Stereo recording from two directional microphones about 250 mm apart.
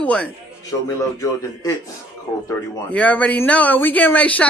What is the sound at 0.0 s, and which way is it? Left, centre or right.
Speech, centre.